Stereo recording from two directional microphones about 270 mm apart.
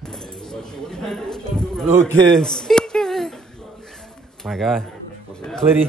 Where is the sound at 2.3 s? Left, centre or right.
Centre.